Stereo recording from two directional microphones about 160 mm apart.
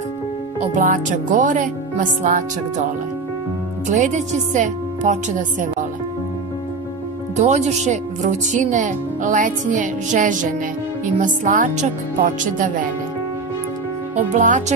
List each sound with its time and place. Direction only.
0.6 s speech: 55° right (ahead or behind)
3.9 s speech: 50° right (ahead or behind)
7.3 s speech: 45° right (ahead or behind)
14.3 s speech: 50° right (ahead or behind)